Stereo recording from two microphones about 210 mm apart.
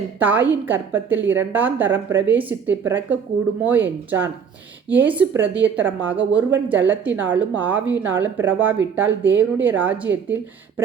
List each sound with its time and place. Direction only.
0.2 s a woman's voice: 10° right (ahead or behind)